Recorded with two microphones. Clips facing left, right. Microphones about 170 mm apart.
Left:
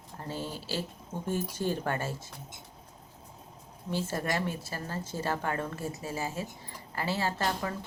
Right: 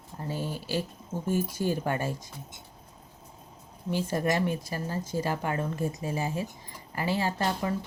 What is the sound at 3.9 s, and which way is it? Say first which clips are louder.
A woman's voice: right 4 dB; 15° right (ahead or behind).